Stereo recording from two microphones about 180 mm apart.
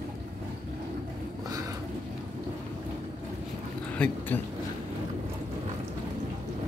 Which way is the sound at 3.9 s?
5° left (ahead or behind).